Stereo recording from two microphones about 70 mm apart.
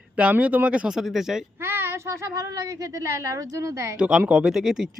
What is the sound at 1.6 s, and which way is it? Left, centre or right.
A woman's voice, right.